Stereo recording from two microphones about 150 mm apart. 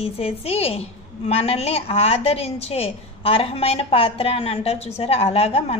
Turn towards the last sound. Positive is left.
turn(degrees=45)  # may be behind; listen again after turning